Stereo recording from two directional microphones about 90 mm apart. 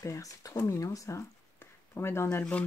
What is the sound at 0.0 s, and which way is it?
Speech, 40° left (ahead or behind).